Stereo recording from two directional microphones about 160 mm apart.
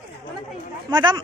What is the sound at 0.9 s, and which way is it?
Speech, 25° right (ahead or behind).